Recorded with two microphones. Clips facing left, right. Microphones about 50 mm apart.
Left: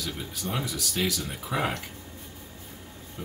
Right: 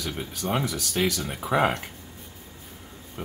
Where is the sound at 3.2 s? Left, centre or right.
Right.